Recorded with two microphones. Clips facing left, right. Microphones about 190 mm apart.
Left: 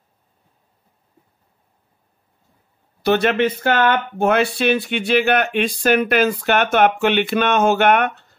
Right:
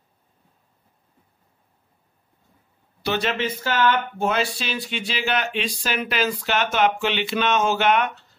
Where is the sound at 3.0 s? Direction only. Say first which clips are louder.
Left 8 dB; 55° left (ahead or behind).